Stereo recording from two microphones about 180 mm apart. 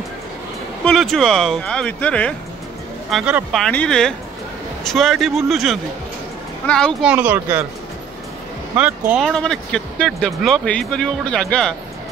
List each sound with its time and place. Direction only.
0.8 s speech: centre (ahead or behind)
7.1 s speech: 10° right (ahead or behind)
8.7 s speech: 5° right (ahead or behind)